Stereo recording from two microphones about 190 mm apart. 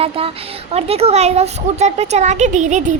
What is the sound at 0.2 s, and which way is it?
A woman's voice, 30° right (ahead or behind).